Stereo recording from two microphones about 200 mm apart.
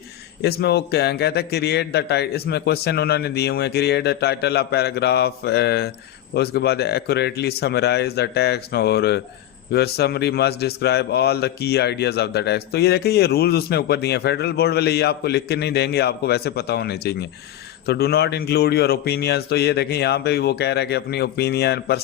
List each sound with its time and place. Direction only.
0.4 s a man's voice: 55° left (ahead or behind)